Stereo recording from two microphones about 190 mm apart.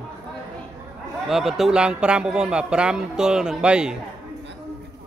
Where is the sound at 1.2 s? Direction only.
Centre (ahead or behind).